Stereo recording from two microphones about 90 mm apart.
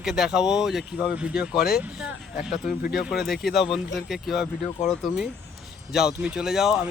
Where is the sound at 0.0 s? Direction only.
5° right (ahead or behind).